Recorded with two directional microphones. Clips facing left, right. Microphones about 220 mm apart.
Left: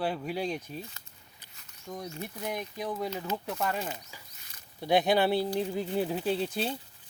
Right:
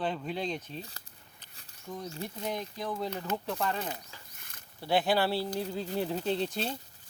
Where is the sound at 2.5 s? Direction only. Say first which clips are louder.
Left 1 dB; 15° left (ahead or behind).